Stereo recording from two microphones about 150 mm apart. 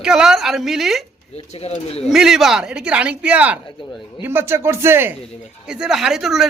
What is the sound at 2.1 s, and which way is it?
A man's voice, centre (ahead or behind).